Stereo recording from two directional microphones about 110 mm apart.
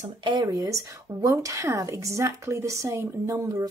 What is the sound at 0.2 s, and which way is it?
A woman's voice, 40° right (ahead or behind).